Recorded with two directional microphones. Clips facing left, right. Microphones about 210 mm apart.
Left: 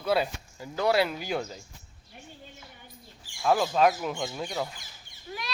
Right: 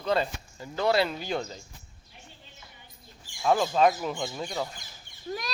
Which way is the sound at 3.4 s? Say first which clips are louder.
Even; centre (ahead or behind).